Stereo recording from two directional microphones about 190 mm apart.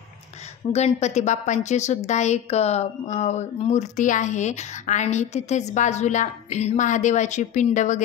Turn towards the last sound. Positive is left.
turn(degrees=40)  # may be behind; listen again after turning